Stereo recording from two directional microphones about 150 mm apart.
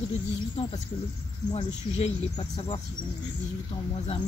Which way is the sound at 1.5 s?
45° left (ahead or behind).